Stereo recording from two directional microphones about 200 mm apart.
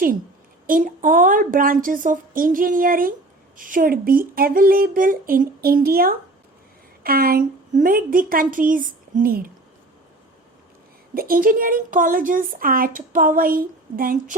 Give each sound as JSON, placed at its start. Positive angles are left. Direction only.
{"t": 0.7, "sound": "a woman's voice", "side_deg": -45}
{"t": 11.1, "sound": "a woman's voice", "side_deg": -45}